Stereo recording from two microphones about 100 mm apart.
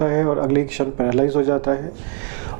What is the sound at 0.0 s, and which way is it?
A man's voice, 15° right (ahead or behind).